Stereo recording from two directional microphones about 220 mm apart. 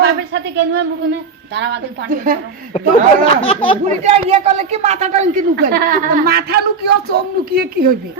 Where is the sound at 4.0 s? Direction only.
30° right (ahead or behind).